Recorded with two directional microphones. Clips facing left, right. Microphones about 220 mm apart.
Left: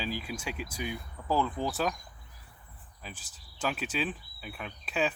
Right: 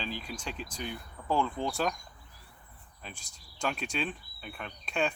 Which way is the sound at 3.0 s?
5° left (ahead or behind).